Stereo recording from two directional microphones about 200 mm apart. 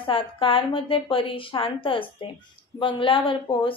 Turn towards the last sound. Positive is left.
turn(degrees=25)  # may be behind; listen again after turning